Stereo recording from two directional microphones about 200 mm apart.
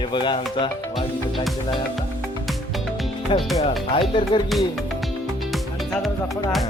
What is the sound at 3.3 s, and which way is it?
Speech, 25° left (ahead or behind).